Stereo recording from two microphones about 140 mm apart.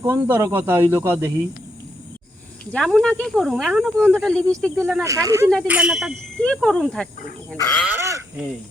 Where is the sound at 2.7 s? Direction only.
5° left (ahead or behind).